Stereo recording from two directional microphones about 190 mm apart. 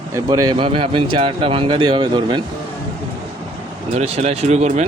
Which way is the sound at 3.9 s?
35° right (ahead or behind).